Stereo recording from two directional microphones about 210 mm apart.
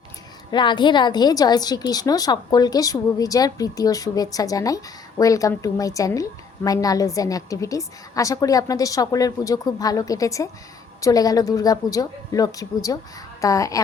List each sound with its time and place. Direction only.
0.5 s a woman's voice: 20° left (ahead or behind)